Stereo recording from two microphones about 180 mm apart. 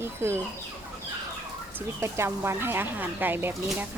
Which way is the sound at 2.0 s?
15° right (ahead or behind).